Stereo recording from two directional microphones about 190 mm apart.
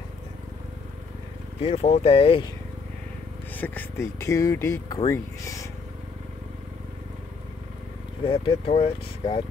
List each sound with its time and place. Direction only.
1.6 s speech: 35° left (ahead or behind)
3.5 s speech: 10° left (ahead or behind)
8.3 s speech: 30° left (ahead or behind)